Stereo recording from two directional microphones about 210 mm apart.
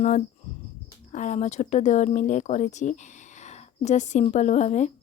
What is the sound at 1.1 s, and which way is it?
Speech, 35° left (ahead or behind).